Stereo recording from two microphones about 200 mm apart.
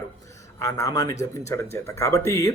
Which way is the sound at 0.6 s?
15° left (ahead or behind).